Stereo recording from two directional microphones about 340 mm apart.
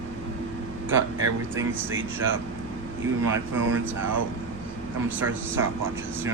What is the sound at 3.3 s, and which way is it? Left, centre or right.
Speech, right.